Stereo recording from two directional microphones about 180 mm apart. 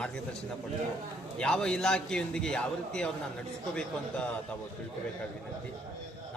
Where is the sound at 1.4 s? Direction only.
5° left (ahead or behind).